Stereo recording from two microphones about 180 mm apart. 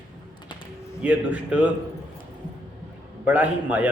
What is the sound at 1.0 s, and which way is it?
Speech, 10° right (ahead or behind).